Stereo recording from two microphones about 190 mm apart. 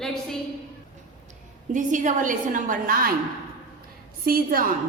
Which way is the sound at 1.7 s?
40° right (ahead or behind).